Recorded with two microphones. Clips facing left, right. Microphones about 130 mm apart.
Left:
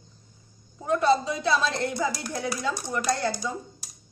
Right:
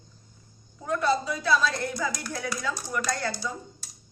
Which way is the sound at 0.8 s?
25° left (ahead or behind).